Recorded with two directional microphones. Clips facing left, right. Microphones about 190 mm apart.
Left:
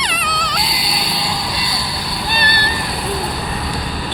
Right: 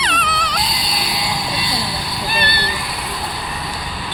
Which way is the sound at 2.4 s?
45° left (ahead or behind).